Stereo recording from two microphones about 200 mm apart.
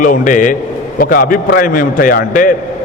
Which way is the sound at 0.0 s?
40° left (ahead or behind).